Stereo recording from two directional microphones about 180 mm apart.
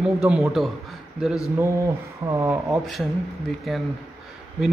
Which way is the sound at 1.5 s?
15° right (ahead or behind).